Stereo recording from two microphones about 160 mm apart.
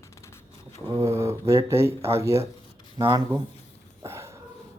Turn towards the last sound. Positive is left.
turn(degrees=-15)  # may be behind; listen again after turning